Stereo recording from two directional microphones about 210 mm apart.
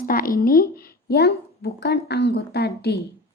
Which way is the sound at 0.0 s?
45° left (ahead or behind).